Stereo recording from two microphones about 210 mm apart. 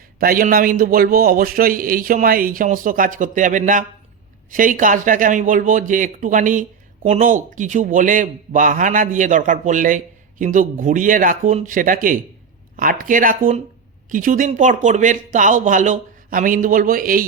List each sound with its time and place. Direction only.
0.2 s a man's voice: 45° right (ahead or behind)